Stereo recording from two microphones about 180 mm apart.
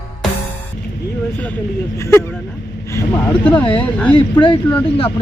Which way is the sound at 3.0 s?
15° left (ahead or behind).